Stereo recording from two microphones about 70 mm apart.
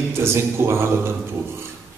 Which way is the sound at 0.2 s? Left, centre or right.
Right.